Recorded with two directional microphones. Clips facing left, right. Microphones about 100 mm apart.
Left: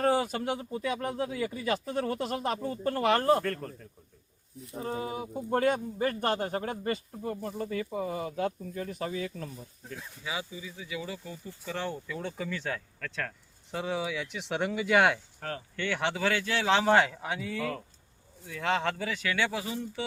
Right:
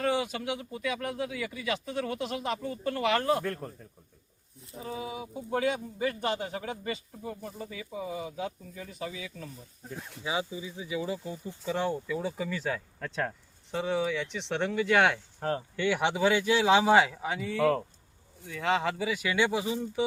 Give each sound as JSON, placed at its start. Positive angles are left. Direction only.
{"t": 0.0, "sound": "speech", "side_deg": 40}
{"t": 3.4, "sound": "speech", "side_deg": -10}
{"t": 4.8, "sound": "speech", "side_deg": 50}
{"t": 10.2, "sound": "speech", "side_deg": -25}
{"t": 13.0, "sound": "speech", "side_deg": -20}
{"t": 13.7, "sound": "speech", "side_deg": 0}
{"t": 15.4, "sound": "speech", "side_deg": -25}
{"t": 15.7, "sound": "speech", "side_deg": -10}